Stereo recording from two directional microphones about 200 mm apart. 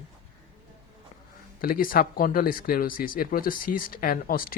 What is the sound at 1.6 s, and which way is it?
Speech, 45° left (ahead or behind).